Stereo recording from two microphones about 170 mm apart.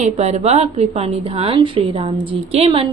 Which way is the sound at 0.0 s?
40° right (ahead or behind).